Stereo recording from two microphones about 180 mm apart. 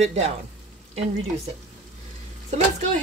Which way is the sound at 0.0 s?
40° right (ahead or behind).